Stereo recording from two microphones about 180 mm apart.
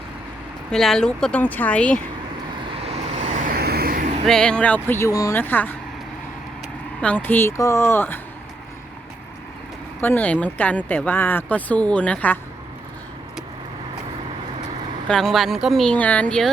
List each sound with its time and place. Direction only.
0.7 s speech: 5° left (ahead or behind)
2.8 s vehicle: 40° right (ahead or behind)
4.3 s speech: 5° left (ahead or behind)
7.0 s speech: 10° left (ahead or behind)
10.0 s speech: 10° left (ahead or behind)
15.0 s speech: 5° left (ahead or behind)